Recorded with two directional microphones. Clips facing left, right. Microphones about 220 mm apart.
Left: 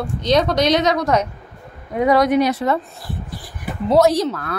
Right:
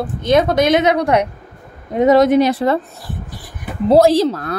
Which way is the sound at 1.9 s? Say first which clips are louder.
Right 4 dB; 25° right (ahead or behind).